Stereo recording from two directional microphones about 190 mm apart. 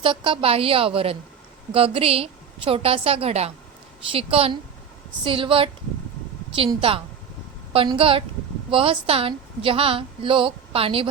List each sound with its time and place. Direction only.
0.0 s a woman's voice: 25° right (ahead or behind)